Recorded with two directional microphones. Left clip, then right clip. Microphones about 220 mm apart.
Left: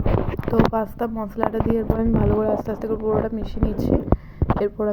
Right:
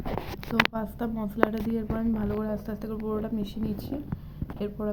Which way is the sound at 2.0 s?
30° left (ahead or behind).